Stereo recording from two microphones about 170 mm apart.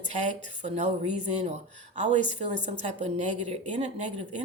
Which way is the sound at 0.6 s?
40° right (ahead or behind).